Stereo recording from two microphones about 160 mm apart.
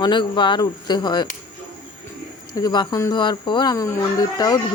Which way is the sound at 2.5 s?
25° left (ahead or behind).